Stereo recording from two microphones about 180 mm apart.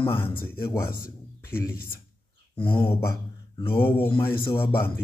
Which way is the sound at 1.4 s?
10° left (ahead or behind).